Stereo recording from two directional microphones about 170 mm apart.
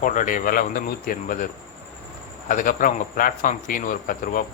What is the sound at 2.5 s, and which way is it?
Speech, 50° left (ahead or behind).